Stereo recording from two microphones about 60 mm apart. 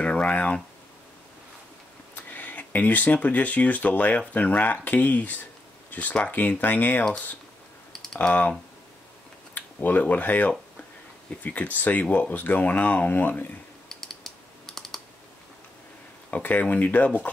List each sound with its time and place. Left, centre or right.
0.0 s a sound: left
2.1 s speech: left
7.9 s computer keyboard: centre
8.2 s speech: left
13.8 s computer keyboard: centre
16.3 s speech: left